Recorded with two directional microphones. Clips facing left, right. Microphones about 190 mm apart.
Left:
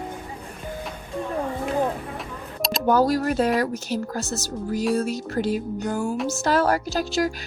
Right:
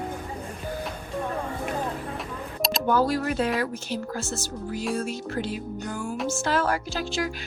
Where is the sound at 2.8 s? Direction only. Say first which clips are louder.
Left 4 dB; 40° left (ahead or behind).